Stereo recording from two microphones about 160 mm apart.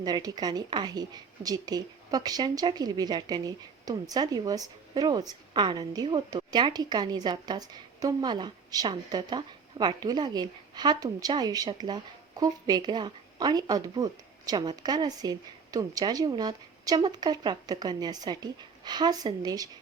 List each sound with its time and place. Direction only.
0.0 s a woman's voice: 25° right (ahead or behind)